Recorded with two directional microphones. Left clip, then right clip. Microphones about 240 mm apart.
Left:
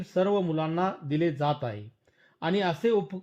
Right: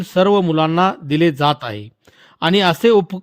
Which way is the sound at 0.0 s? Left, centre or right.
Right.